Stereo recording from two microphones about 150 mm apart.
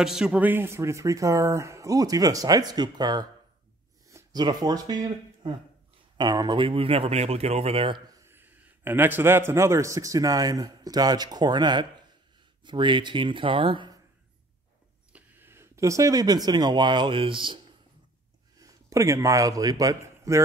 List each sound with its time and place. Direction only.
0.0 s a man's voice: 5° right (ahead or behind); by 8.0 s 40° right (ahead or behind)
8.3 s a man's voice: 15° right (ahead or behind); by 13.9 s 35° right (ahead or behind)
15.1 s speech: 15° right (ahead or behind); by 17.6 s 35° right (ahead or behind)
18.6 s speech: 20° right (ahead or behind)